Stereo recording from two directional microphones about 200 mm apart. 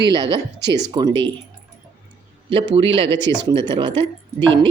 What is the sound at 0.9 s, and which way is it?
Speech, 25° right (ahead or behind).